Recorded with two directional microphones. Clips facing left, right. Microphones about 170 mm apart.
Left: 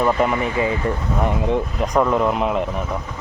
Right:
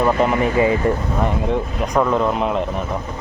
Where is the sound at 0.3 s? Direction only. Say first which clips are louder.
Right 4 dB; 40° right (ahead or behind).